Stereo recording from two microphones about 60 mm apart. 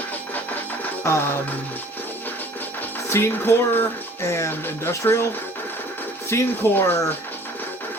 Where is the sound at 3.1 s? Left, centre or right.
Left.